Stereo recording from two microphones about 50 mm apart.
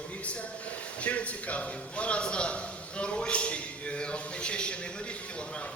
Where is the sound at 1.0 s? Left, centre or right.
Left.